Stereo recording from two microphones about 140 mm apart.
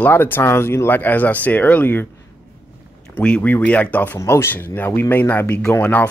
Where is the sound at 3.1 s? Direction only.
10° left (ahead or behind).